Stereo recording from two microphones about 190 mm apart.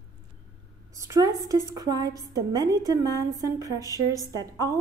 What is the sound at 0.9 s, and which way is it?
A woman's voice, 15° right (ahead or behind).